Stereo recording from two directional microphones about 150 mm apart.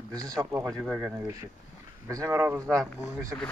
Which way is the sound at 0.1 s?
25° right (ahead or behind).